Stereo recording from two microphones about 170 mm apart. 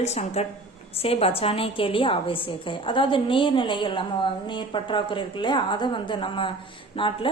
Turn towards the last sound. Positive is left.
turn(degrees=30)  # may be behind; listen again after turning